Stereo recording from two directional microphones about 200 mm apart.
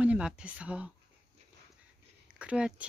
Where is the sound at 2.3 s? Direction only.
5° right (ahead or behind).